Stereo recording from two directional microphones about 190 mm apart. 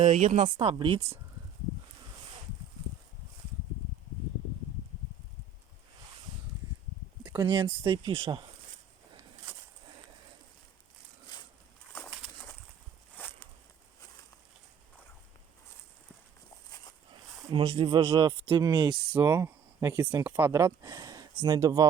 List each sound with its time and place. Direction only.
0.0 s speech: 40° right (ahead or behind)
7.3 s speech: 25° right (ahead or behind)
13.1 s a sound: 10° left (ahead or behind)
17.5 s speech: 25° right (ahead or behind)
19.1 s speech: 10° right (ahead or behind)